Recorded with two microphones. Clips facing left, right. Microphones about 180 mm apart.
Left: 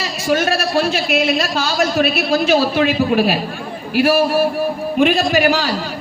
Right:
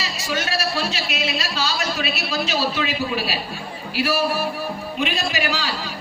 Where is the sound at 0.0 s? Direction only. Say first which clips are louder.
Left 9 dB; 50° left (ahead or behind).